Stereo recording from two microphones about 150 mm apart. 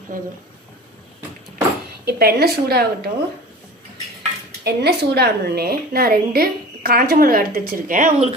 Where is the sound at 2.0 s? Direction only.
90° right.